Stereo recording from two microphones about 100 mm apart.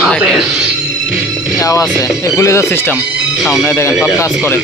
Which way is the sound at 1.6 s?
35° left (ahead or behind).